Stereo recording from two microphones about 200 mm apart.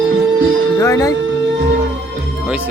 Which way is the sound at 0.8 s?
15° left (ahead or behind).